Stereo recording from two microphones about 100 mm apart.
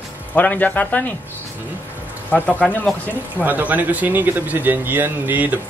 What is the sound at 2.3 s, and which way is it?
Speech, 15° left (ahead or behind).